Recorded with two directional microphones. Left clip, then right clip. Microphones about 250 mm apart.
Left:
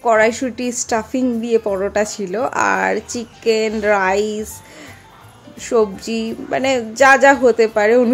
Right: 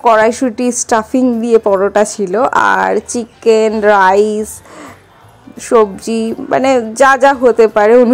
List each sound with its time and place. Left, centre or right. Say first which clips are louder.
0.0 s a woman's voice: right 5 dB; centre
5.6 s a woman's voice: right 6 dB; centre